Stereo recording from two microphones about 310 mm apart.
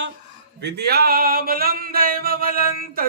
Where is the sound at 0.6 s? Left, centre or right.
Right.